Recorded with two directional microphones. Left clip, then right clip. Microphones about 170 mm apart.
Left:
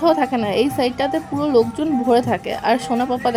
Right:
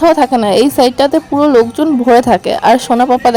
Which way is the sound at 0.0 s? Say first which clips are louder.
Right 8 dB; 40° right (ahead or behind).